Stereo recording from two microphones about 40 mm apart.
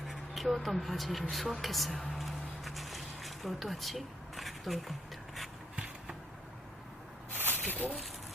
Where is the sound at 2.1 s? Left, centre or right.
Centre.